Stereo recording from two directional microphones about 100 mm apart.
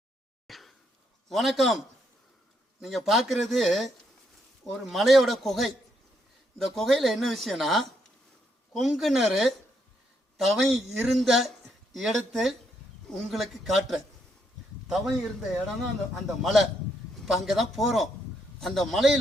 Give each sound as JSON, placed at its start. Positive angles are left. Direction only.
{"t": 0.4, "sound": "a sound", "side_deg": 0}
{"t": 1.3, "sound": "speech", "side_deg": 0}
{"t": 2.8, "sound": "a man's voice", "side_deg": 0}